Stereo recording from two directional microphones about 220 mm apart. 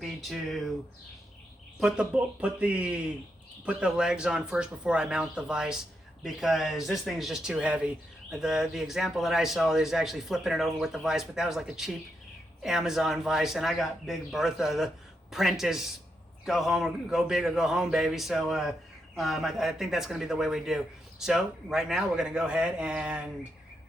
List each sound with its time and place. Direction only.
0.2 s speech: centre (ahead or behind)
1.8 s speech: 5° right (ahead or behind)